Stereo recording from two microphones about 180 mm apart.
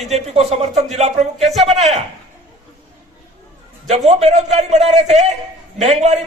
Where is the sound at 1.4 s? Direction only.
Centre (ahead or behind).